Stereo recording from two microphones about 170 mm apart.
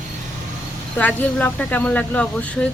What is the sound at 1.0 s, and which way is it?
Speech, 10° left (ahead or behind).